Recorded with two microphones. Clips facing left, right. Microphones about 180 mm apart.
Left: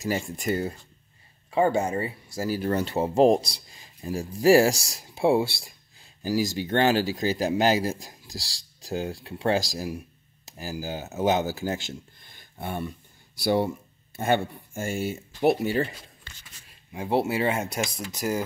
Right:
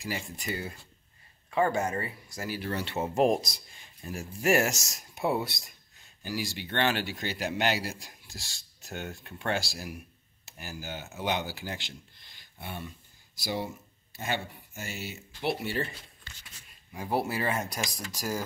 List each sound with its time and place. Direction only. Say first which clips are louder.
0.0 s speech: left 8 dB; 45° left (ahead or behind)
1.5 s speech: left 4 dB; 25° left (ahead or behind); by 15.9 s 40° left (ahead or behind)
16.9 s speech: left 5 dB; 25° left (ahead or behind)